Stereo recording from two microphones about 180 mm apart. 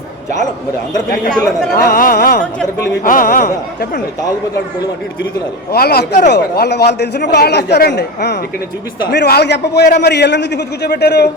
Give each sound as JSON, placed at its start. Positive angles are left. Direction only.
{"t": 1.3, "sound": "speech", "side_deg": 5}
{"t": 1.7, "sound": "speech", "side_deg": 55}
{"t": 5.7, "sound": "a man's voice", "side_deg": 60}